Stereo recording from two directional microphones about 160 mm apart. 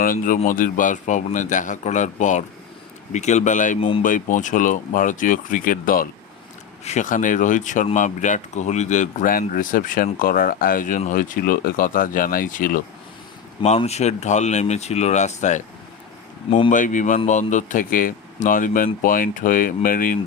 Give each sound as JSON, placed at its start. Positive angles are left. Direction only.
{"t": 0.0, "sound": "speech", "side_deg": 60}
{"t": 3.8, "sound": "speech", "side_deg": 35}
{"t": 4.0, "sound": "speech", "side_deg": 55}
{"t": 6.8, "sound": "speech", "side_deg": 50}
{"t": 13.6, "sound": "speech", "side_deg": 40}
{"t": 16.5, "sound": "speech", "side_deg": 35}
{"t": 16.7, "sound": "speech", "side_deg": 50}